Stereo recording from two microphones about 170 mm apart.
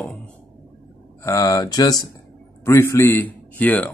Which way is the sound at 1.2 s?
20° left (ahead or behind).